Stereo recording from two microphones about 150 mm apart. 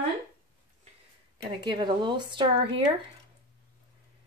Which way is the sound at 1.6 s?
30° right (ahead or behind).